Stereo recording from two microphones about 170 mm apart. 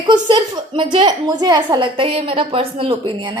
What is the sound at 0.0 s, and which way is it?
A woman's voice, 25° right (ahead or behind).